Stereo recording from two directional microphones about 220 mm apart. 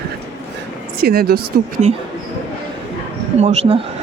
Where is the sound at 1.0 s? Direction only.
45° right (ahead or behind).